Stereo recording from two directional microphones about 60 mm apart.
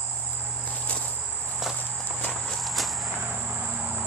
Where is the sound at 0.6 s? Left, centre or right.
Left.